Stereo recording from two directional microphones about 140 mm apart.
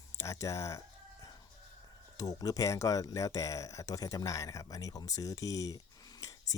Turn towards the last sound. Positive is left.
turn(degrees=25)  # may be behind; listen again after turning